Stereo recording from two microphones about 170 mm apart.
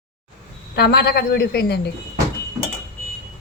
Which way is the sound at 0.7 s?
70° left (ahead or behind).